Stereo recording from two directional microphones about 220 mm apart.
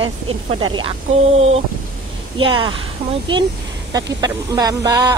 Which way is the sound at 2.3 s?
20° right (ahead or behind).